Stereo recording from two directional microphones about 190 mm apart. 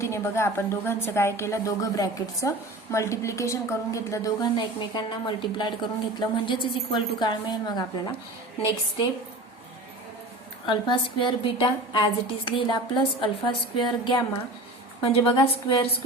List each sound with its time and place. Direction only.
0.0 s a woman's voice: 15° left (ahead or behind)
10.7 s a woman's voice: 25° left (ahead or behind)